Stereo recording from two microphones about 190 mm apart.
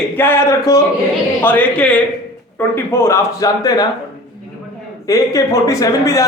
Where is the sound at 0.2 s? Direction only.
10° left (ahead or behind).